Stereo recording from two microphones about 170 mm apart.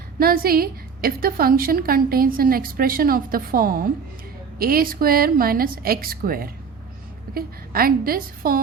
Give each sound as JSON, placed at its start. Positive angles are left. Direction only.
{"t": 0.2, "sound": "a woman's voice", "side_deg": -60}